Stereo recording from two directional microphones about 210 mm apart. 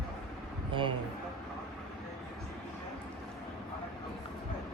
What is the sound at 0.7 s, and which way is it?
Speech, 25° right (ahead or behind).